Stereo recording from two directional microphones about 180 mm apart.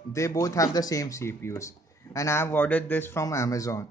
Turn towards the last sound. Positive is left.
turn(degrees=15)  # may be behind; listen again after turning